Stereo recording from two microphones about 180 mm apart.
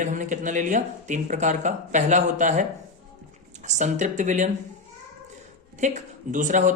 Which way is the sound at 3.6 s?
40° right (ahead or behind).